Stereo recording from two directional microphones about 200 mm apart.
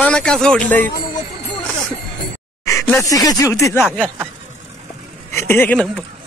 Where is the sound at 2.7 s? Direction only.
15° left (ahead or behind).